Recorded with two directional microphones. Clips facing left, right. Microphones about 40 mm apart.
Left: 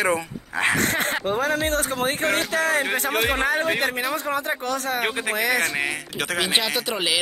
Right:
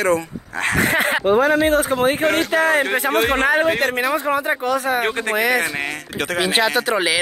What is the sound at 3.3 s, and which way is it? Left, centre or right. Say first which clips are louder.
Speech: right 6 dB; centre.